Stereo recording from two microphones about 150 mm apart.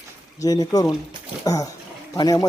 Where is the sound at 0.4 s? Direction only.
25° left (ahead or behind).